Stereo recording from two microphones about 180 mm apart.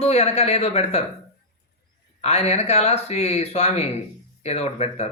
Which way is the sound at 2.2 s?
35° left (ahead or behind).